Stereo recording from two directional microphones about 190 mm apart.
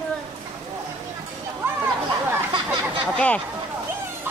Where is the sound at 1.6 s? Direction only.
10° right (ahead or behind).